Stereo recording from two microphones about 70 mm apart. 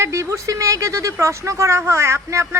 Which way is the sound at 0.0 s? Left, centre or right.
Right.